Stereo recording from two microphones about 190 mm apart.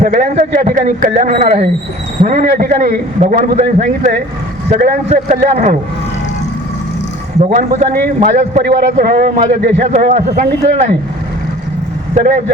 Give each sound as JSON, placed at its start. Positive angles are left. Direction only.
{"t": 0.0, "sound": "a man's voice", "side_deg": -45}
{"t": 7.3, "sound": "a man's voice", "side_deg": -40}
{"t": 8.3, "sound": "a man's voice", "side_deg": -35}
{"t": 8.6, "sound": "a man's voice", "side_deg": -50}